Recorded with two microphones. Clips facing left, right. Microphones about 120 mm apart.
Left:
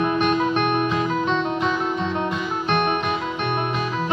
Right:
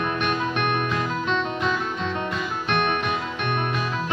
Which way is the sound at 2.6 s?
35° left (ahead or behind).